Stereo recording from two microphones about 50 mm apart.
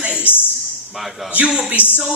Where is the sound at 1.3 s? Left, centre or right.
Right.